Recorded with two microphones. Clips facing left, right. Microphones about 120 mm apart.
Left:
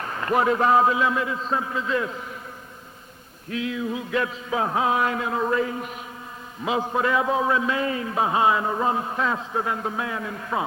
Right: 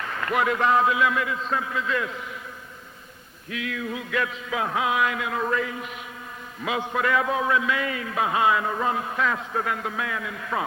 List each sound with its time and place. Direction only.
0.0 s a man's voice: 30° left (ahead or behind)
3.5 s music: 25° left (ahead or behind)
6.6 s a man's voice: 30° left (ahead or behind)